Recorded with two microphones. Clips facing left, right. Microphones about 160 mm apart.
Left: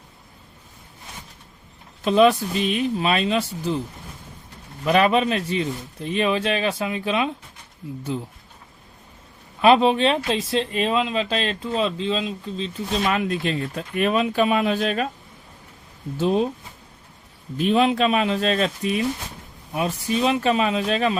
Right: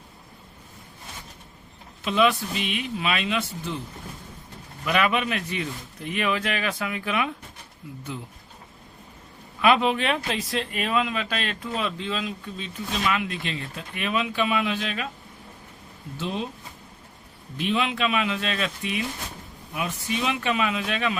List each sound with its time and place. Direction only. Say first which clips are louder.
2.0 s speech: left 6 dB; 40° left (ahead or behind)
4.9 s a man's voice: left 6 dB; 35° left (ahead or behind)
9.6 s a man's voice: left 5 dB; 30° left (ahead or behind)
13.0 s speech: left 4 dB; 40° left (ahead or behind)
16.1 s speech: left 10 dB; 45° left (ahead or behind)
17.6 s speech: left 7 dB; 40° left (ahead or behind)